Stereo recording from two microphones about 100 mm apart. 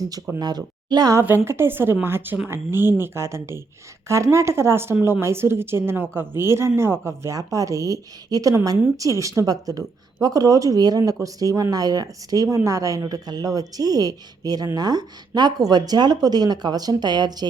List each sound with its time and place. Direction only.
0.3 s speech: 45° right (ahead or behind)
1.5 s speech: 25° right (ahead or behind)
4.9 s a woman's voice: 15° right (ahead or behind)
5.2 s speech: 25° right (ahead or behind); by 17.4 s 45° right (ahead or behind)